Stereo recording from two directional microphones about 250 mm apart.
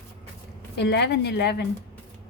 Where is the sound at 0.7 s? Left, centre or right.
Left.